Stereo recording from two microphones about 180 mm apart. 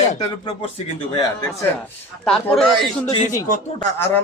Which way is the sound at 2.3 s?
Centre (ahead or behind).